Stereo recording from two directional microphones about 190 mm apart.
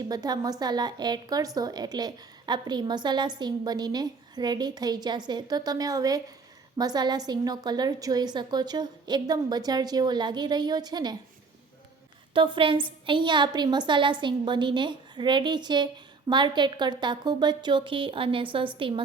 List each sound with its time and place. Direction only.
0.1 s speech: 20° right (ahead or behind)
12.3 s speech: 25° right (ahead or behind)